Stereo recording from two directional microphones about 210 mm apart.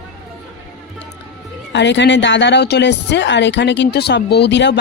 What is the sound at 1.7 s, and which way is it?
Speech, 55° left (ahead or behind).